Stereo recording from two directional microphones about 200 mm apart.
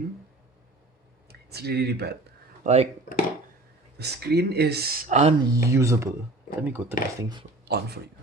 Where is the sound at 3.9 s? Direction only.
55° right (ahead or behind).